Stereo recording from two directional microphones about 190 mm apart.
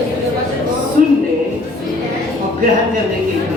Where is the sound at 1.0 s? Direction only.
45° right (ahead or behind).